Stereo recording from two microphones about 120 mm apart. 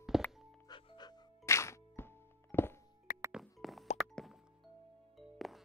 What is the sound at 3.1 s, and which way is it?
Music, 90° left.